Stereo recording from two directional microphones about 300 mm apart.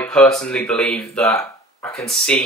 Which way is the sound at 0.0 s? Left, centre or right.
Centre.